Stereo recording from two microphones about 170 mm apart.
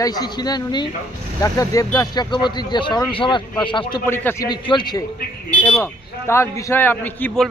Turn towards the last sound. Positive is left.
turn(degrees=10)  # may be behind; listen again after turning